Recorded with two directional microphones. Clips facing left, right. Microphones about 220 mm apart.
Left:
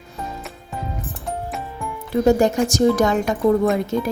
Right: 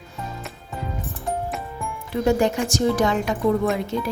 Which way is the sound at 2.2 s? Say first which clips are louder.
Left 4 dB; 40° left (ahead or behind).